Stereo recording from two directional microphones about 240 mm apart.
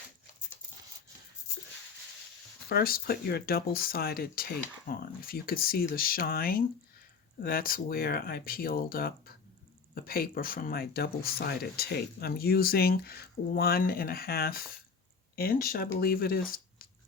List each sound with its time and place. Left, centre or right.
2.6 s speech: left